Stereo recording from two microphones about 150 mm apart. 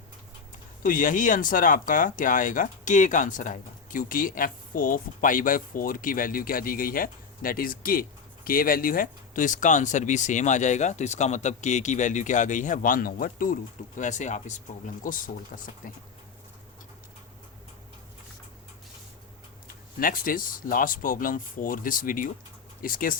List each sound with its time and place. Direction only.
0.8 s speech: 60° left (ahead or behind)
14.0 s speech: 55° left (ahead or behind)
15.0 s speech: 65° left (ahead or behind)
19.6 s speech: 70° left (ahead or behind)